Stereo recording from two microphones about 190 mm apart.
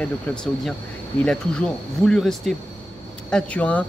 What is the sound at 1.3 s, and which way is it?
Speech, 5° left (ahead or behind).